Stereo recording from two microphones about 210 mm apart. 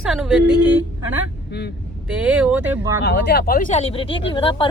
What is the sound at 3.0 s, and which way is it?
Speech, 55° left (ahead or behind).